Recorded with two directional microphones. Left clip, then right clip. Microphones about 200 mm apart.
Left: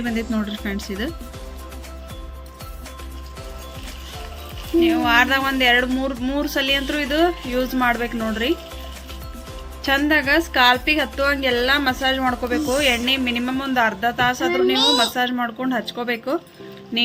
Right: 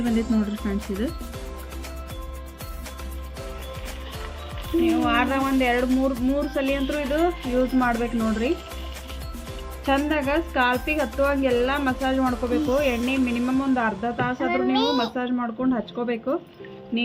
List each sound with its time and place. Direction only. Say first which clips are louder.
0.0 s speech: even; 5° right (ahead or behind)
4.8 s speech: left 5 dB; centre (ahead or behind)
9.8 s speech: left 5 dB; centre (ahead or behind)
14.5 s a woman's voice: left 3 dB; 50° right (ahead or behind)
15.1 s speech: left 5 dB; 5° left (ahead or behind)